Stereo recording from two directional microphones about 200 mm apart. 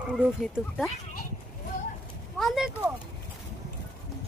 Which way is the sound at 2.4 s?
Centre (ahead or behind).